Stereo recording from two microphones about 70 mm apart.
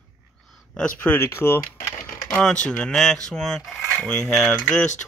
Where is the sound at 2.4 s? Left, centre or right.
Centre.